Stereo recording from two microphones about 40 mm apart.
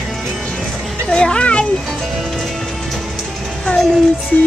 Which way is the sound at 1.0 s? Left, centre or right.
Left.